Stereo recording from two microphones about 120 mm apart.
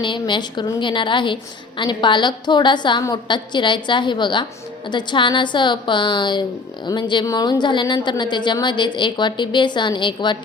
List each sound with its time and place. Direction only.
0.0 s a woman's voice: 40° left (ahead or behind)